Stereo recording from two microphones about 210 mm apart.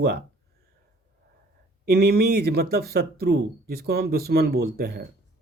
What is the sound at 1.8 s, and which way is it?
Speech, 50° right (ahead or behind).